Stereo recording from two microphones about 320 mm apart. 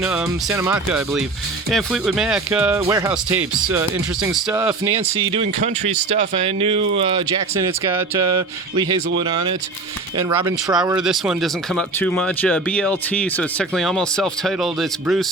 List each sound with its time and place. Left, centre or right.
0.0 s speech: centre
4.5 s speech: centre
11.0 s speech: centre